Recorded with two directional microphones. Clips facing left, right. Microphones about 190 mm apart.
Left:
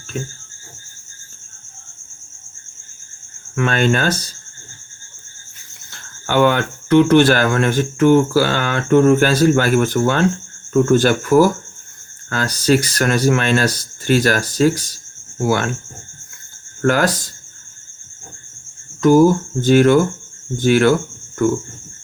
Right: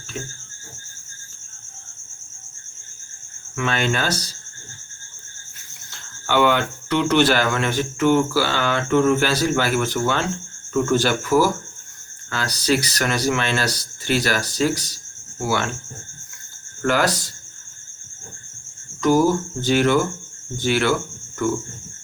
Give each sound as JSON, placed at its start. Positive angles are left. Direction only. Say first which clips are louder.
{"t": 3.5, "sound": "speech", "louder": "left 6 dB", "side_deg": 50}
{"t": 5.9, "sound": "speech", "louder": "left 3 dB", "side_deg": 45}
{"t": 12.5, "sound": "speech", "louder": "left 5 dB", "side_deg": 50}
{"t": 16.8, "sound": "speech", "louder": "left 4 dB", "side_deg": 50}
{"t": 19.0, "sound": "speech", "louder": "left 6 dB", "side_deg": 50}